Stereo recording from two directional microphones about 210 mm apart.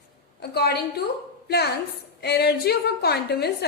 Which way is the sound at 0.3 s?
50° left (ahead or behind).